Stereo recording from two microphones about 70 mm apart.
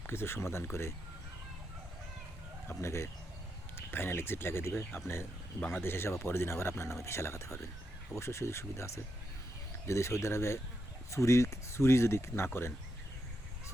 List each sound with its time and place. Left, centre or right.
0.1 s speech: left
2.6 s speech: left
5.5 s a man's voice: left
5.8 s speech: left